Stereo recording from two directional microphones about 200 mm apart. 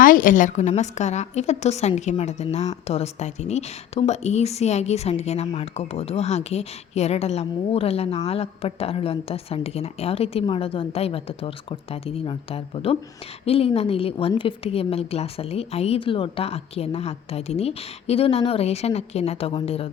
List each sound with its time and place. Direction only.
0.0 s a woman's voice: 45° left (ahead or behind)